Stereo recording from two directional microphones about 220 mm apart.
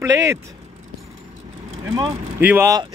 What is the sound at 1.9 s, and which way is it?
Vehicle, 20° right (ahead or behind).